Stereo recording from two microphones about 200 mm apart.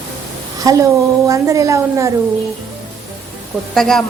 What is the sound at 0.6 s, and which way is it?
A woman's voice, 15° right (ahead or behind).